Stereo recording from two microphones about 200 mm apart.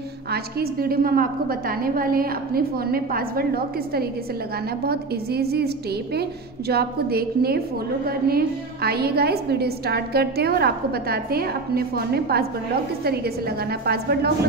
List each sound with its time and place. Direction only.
0.3 s a woman's voice: 50° right (ahead or behind)